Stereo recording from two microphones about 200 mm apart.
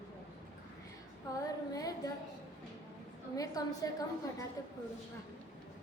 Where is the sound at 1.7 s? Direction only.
15° left (ahead or behind).